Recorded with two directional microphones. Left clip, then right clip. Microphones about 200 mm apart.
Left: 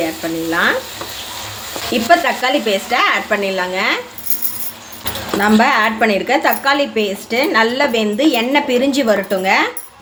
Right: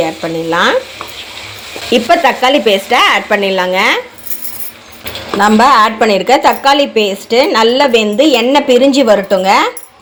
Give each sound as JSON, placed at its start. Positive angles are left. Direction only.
{"t": 0.5, "sound": "a woman's voice", "side_deg": -25}
{"t": 1.9, "sound": "a woman's voice", "side_deg": -30}
{"t": 5.4, "sound": "a woman's voice", "side_deg": -20}